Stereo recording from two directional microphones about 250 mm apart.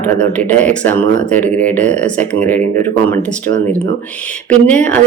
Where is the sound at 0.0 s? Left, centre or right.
Centre.